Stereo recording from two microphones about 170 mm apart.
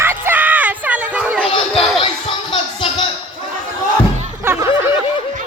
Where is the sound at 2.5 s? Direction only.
30° left (ahead or behind).